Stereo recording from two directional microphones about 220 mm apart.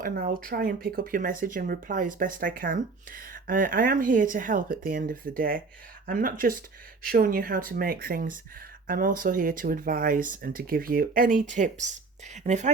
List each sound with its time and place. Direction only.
0.0 s speech: 40° right (ahead or behind)